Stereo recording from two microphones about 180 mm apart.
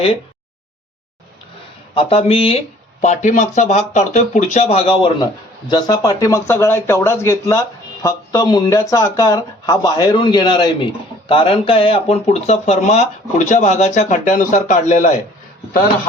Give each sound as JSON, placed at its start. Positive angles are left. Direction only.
{"t": 2.0, "sound": "speech", "side_deg": 35}
{"t": 5.2, "sound": "speech", "side_deg": 25}